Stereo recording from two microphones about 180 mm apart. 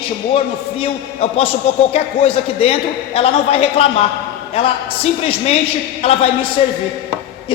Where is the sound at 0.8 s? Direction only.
35° left (ahead or behind).